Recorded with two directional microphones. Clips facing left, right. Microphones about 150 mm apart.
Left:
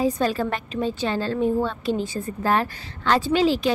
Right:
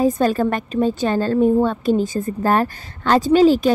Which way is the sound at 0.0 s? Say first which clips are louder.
Right 5 dB; 45° right (ahead or behind).